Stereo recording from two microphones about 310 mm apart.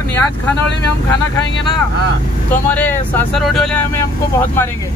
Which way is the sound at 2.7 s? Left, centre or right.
Centre.